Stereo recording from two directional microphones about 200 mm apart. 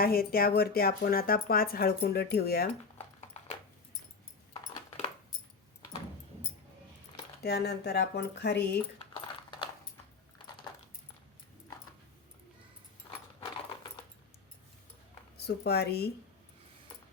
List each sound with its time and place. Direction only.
0.0 s speech: 50° left (ahead or behind)
3.3 s a sound: 35° left (ahead or behind)
7.4 s speech: 55° left (ahead or behind)
9.0 s keys jangling: 25° left (ahead or behind)
10.3 s typing: 20° left (ahead or behind)
15.4 s speech: 55° left (ahead or behind)